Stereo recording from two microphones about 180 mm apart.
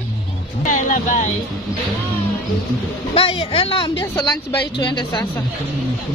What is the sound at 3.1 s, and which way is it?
Speech, 35° left (ahead or behind).